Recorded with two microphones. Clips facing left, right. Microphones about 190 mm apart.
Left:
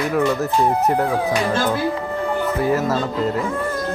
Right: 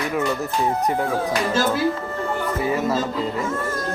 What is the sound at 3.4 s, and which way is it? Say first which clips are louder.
Speech: left 2 dB; 15° left (ahead or behind).